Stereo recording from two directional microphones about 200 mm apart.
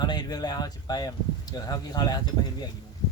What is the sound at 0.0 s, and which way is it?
Speech, 20° left (ahead or behind).